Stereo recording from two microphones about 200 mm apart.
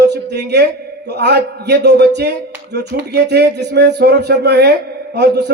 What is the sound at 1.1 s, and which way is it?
A man's voice, 55° right (ahead or behind).